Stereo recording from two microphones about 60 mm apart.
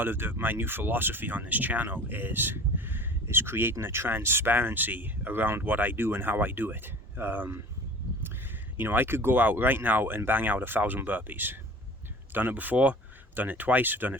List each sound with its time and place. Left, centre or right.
0.0 s speech: right
8.8 s speech: right